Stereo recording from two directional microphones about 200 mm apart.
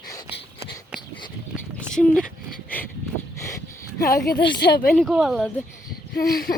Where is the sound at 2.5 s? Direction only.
10° left (ahead or behind).